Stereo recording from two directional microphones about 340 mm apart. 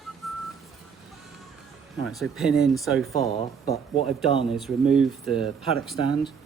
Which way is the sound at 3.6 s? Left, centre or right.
Centre.